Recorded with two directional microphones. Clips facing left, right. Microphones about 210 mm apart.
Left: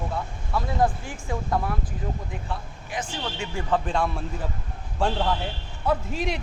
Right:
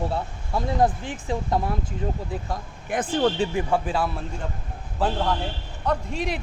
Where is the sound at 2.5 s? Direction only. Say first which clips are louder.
Right 3 dB; 55° right (ahead or behind).